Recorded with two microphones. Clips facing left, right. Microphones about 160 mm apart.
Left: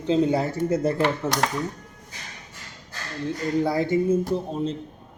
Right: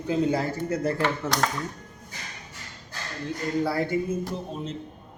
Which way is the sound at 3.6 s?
20° left (ahead or behind).